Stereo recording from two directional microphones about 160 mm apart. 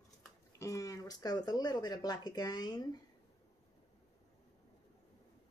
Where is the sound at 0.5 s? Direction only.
20° left (ahead or behind).